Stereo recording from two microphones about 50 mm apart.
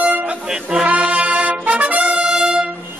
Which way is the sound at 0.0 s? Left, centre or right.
Right.